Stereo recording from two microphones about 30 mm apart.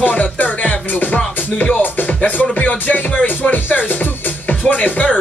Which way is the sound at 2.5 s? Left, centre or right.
Left.